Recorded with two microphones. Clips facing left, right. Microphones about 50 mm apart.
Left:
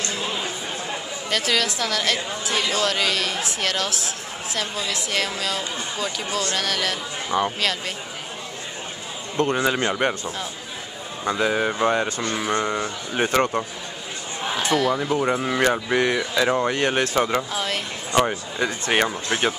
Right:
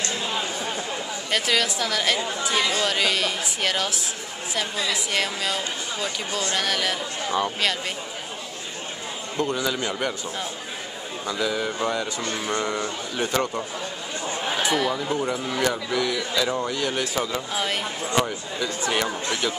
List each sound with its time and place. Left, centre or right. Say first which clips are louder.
1.3 s a woman's voice: even; centre
7.2 s speech: left 2 dB; centre
9.4 s speech: left 4 dB; left
11.2 s speech: left 5 dB; left
12.3 s a sound: left 3 dB; left
13.1 s speech: left 5 dB; left
14.6 s speech: left 3 dB; centre
15.2 s speech: left 6 dB; left
17.5 s a woman's voice: even; centre
18.1 s speech: left 5 dB; left